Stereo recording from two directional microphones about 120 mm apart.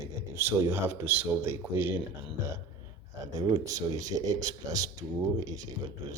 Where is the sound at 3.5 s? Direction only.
30° right (ahead or behind).